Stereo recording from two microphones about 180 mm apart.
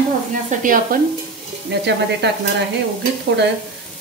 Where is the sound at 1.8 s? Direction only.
70° right (ahead or behind).